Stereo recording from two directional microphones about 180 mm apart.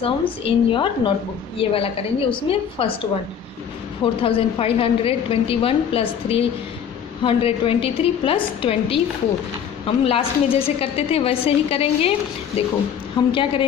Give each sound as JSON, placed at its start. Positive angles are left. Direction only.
{"t": 0.0, "sound": "a woman's voice", "side_deg": 30}
{"t": 4.0, "sound": "a woman's voice", "side_deg": 30}